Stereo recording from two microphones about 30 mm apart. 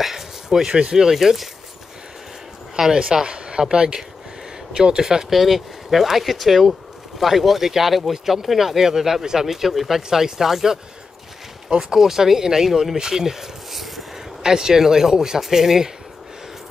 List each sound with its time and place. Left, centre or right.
0.1 s a sound: centre
0.7 s speech: right
1.1 s speech: centre
2.9 s speech: right
3.3 s a sound: right
3.7 s speech: right
5.3 s speech: centre
11.9 s speech: centre